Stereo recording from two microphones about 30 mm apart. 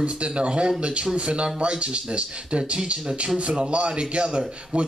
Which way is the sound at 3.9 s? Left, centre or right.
Right.